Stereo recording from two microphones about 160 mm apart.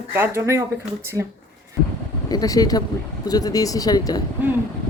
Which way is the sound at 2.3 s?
25° left (ahead or behind).